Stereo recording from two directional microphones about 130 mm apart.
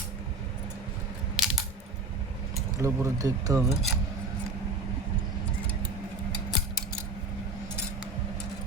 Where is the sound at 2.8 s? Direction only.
25° right (ahead or behind).